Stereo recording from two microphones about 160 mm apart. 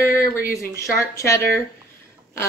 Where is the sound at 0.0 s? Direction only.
15° left (ahead or behind).